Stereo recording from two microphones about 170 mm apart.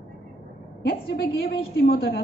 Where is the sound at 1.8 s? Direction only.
65° left (ahead or behind).